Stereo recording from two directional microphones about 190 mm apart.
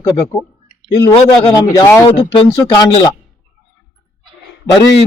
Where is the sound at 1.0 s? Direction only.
20° left (ahead or behind).